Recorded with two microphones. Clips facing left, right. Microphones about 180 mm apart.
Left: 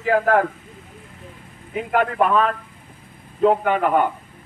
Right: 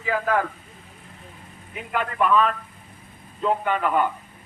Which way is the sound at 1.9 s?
55° left (ahead or behind).